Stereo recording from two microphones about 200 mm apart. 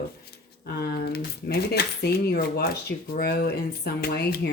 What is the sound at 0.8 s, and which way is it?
Speech, 50° left (ahead or behind).